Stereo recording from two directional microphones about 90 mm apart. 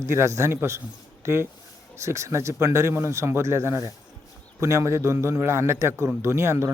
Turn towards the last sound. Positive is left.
turn(degrees=-30)  # may be behind; listen again after turning